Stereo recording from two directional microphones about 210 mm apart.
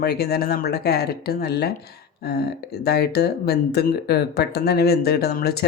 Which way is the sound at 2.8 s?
50° left (ahead or behind).